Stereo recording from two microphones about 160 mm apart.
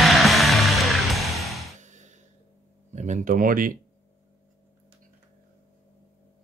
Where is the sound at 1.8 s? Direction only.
50° right (ahead or behind).